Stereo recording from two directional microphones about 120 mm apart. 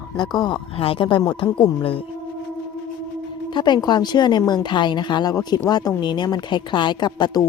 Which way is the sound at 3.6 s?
40° left (ahead or behind).